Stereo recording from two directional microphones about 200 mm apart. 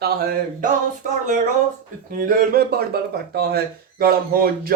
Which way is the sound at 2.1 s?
50° right (ahead or behind).